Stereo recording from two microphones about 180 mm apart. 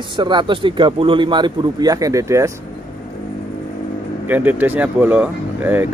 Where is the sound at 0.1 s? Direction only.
25° right (ahead or behind).